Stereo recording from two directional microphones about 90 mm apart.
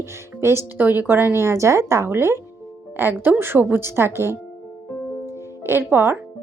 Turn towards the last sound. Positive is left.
turn(degrees=-25)  # may be behind; listen again after turning